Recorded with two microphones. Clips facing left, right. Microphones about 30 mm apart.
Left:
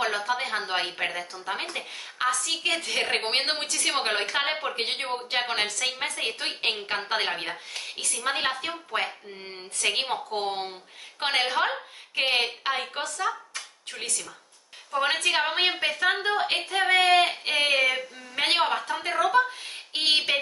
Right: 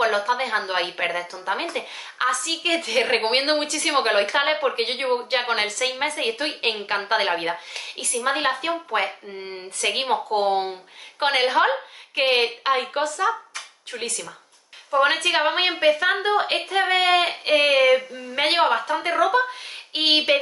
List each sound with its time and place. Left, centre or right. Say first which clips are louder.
0.0 s a woman's voice: right 6 dB; centre
9.9 s a woman's voice: right 5 dB; right
10.3 s a woman's voice: right 8 dB; centre
15.0 s a woman's voice: right 5 dB; centre
18.9 s a woman's voice: right 5 dB; centre